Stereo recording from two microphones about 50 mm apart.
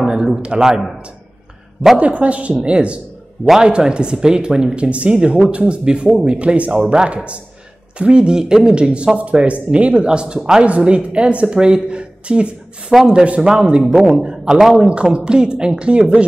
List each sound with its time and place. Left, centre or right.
0.0 s a man's voice: centre
2.0 s speech: right
6.3 s a man's voice: right